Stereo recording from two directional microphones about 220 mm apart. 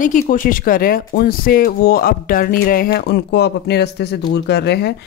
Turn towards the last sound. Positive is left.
turn(degrees=50)  # may be behind; listen again after turning